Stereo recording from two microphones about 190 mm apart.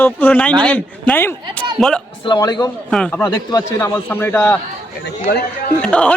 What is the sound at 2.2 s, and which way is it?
Speech, 25° left (ahead or behind).